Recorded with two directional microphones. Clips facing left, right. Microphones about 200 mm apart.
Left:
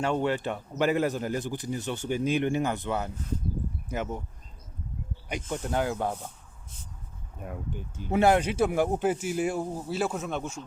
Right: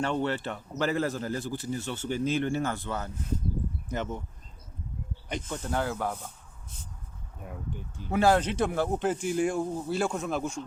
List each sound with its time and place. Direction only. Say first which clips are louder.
0.0 s speech: left 2 dB; 10° left (ahead or behind)
5.3 s speech: left 2 dB; 15° left (ahead or behind)
8.1 s speech: left 1 dB; 20° left (ahead or behind)
8.4 s speech: left 2 dB; 10° left (ahead or behind)